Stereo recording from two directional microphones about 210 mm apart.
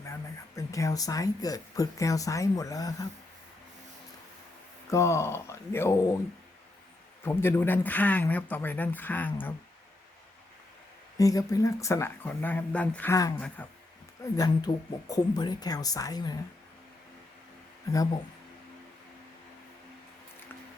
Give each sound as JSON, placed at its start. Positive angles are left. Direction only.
{"t": 0.0, "sound": "speech", "side_deg": 15}
{"t": 4.9, "sound": "speech", "side_deg": 15}
{"t": 7.3, "sound": "speech", "side_deg": 10}
{"t": 11.2, "sound": "speech", "side_deg": 15}